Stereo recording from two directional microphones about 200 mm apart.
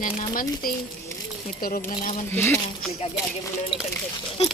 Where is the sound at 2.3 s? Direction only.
10° left (ahead or behind).